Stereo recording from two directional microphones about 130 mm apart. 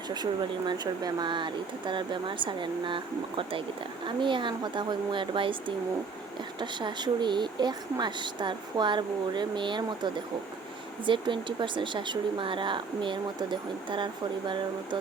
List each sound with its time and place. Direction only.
0.1 s speech: 35° right (ahead or behind)